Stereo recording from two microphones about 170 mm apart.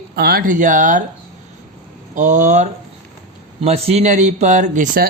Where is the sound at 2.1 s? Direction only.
45° right (ahead or behind).